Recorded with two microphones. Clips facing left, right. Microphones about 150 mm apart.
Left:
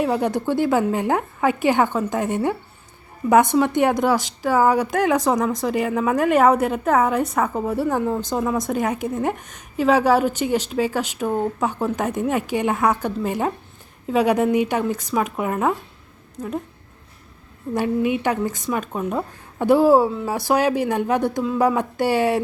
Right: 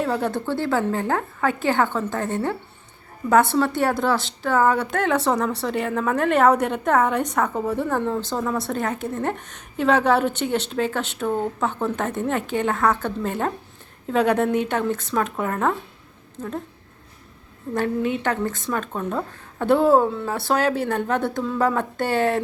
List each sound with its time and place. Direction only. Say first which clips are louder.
0.0 s a woman's voice: left 3 dB; 15° left (ahead or behind)
17.7 s a woman's voice: left 2 dB; 10° left (ahead or behind)